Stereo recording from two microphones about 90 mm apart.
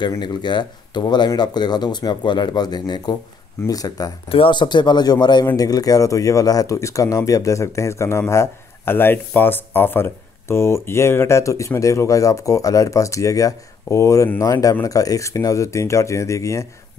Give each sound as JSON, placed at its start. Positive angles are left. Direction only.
{"t": 0.2, "sound": "speech", "side_deg": 55}
{"t": 4.3, "sound": "speech", "side_deg": 70}